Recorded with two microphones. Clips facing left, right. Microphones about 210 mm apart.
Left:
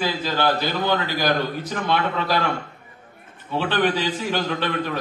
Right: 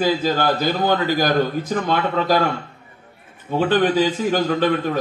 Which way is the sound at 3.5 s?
45° right (ahead or behind).